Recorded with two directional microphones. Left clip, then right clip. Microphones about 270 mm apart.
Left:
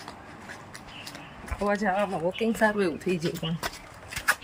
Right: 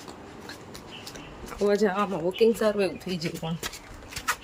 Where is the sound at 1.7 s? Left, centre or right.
Centre.